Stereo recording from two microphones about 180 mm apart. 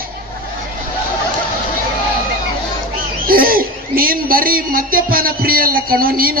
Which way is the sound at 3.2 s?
55° right (ahead or behind).